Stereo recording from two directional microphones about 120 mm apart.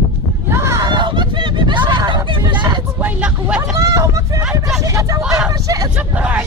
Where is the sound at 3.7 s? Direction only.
25° right (ahead or behind).